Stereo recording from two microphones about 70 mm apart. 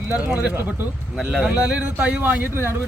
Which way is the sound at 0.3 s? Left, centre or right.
Centre.